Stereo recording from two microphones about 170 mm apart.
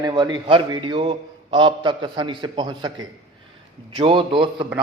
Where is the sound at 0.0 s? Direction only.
25° right (ahead or behind).